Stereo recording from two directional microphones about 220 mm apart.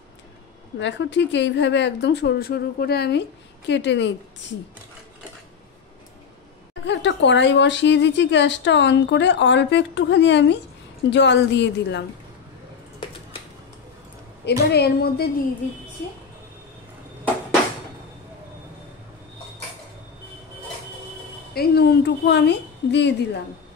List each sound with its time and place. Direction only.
0.7 s a woman's voice: 55° left (ahead or behind)
6.9 s a woman's voice: 55° left (ahead or behind)
14.4 s a woman's voice: 50° left (ahead or behind)
21.5 s a woman's voice: 45° left (ahead or behind)